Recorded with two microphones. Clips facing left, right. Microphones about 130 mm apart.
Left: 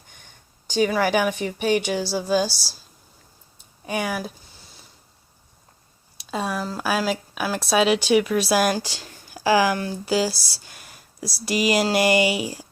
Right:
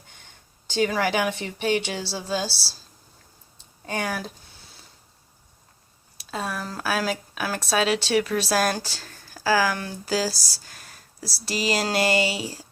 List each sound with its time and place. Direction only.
0.7 s a woman's voice: 15° left (ahead or behind)
3.8 s a woman's voice: 15° left (ahead or behind)
6.3 s a woman's voice: 10° left (ahead or behind)
10.3 s speech: 40° right (ahead or behind)
10.7 s a sound: 10° left (ahead or behind)
11.6 s a woman's voice: 15° left (ahead or behind)